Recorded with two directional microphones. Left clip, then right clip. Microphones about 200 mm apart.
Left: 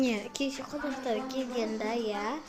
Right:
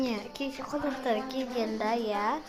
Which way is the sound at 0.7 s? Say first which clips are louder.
Right 3 dB; centre (ahead or behind).